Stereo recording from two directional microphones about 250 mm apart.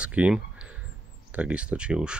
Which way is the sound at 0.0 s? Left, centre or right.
Centre.